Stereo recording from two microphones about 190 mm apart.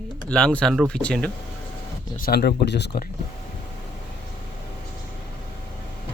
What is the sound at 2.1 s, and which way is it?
Speech, 50° left (ahead or behind).